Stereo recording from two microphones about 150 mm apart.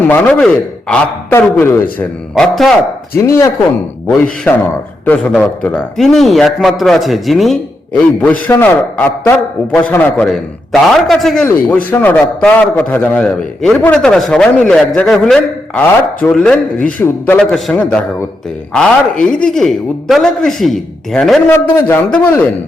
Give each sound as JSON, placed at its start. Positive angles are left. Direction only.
{"t": 0.0, "sound": "a man's voice", "side_deg": 10}
{"t": 2.3, "sound": "speech", "side_deg": 0}
{"t": 3.2, "sound": "a man's voice", "side_deg": 20}
{"t": 8.2, "sound": "a man's voice", "side_deg": 10}
{"t": 21.5, "sound": "a man's voice", "side_deg": 15}